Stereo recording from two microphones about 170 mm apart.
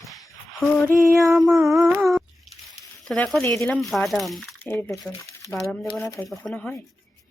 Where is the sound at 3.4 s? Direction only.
15° left (ahead or behind).